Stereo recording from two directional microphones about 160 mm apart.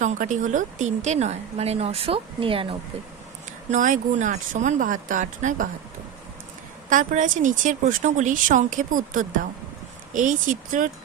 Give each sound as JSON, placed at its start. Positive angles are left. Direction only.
{"t": 0.0, "sound": "speech", "side_deg": -50}
{"t": 3.7, "sound": "speech", "side_deg": -55}
{"t": 6.9, "sound": "speech", "side_deg": -50}